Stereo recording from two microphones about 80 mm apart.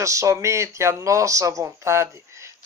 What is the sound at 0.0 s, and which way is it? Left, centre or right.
Speech, right.